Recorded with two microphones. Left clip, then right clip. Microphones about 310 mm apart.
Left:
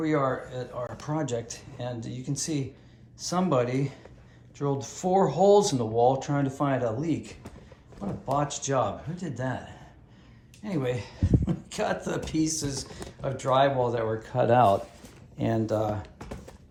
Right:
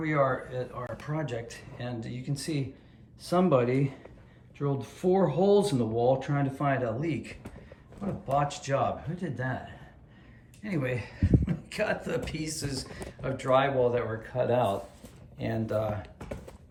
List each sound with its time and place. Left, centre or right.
0.0 s speech: centre
8.4 s speech: centre
10.6 s speech: centre; by 14.8 s left
15.6 s speech: centre
16.1 s typing: centre